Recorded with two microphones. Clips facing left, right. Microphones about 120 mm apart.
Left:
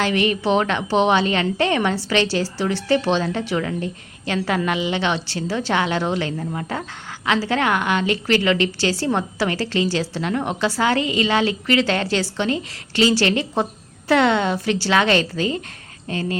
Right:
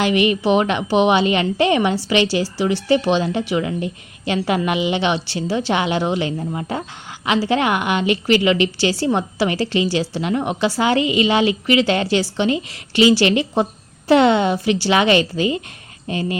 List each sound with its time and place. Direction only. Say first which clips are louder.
0.0 s a woman's voice: right 3 dB; 15° right (ahead or behind)